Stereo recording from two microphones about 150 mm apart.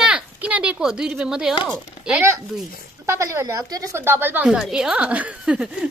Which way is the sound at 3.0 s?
20° right (ahead or behind).